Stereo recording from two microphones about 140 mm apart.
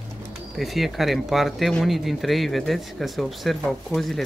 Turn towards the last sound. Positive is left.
turn(degrees=0)  # may be behind; listen again after turning